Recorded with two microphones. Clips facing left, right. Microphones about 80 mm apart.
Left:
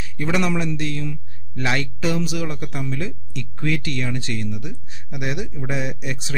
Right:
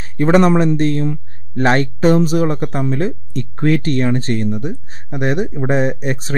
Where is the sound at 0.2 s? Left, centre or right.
Right.